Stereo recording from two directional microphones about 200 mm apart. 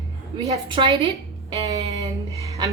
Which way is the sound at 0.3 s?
25° right (ahead or behind).